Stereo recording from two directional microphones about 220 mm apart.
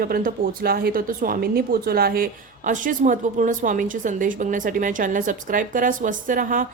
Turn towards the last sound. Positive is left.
turn(degrees=-35)  # may be behind; listen again after turning